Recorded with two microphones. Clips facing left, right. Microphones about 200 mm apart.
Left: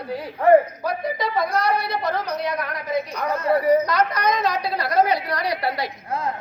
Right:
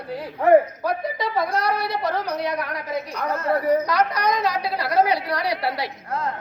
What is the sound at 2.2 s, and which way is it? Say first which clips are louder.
Speech: even; 10° right (ahead or behind).